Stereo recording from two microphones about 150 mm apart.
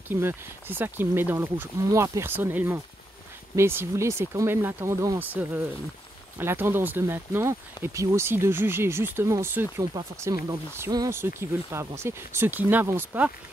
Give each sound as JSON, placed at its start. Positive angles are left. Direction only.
{"t": 0.1, "sound": "speech", "side_deg": -15}
{"t": 9.9, "sound": "speech", "side_deg": -25}